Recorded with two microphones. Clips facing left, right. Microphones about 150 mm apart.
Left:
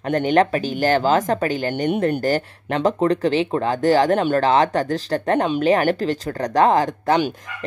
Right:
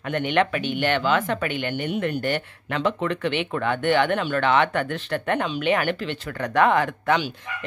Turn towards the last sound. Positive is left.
turn(degrees=40)  # may be behind; listen again after turning